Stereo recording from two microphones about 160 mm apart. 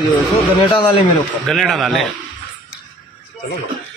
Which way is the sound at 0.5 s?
30° left (ahead or behind).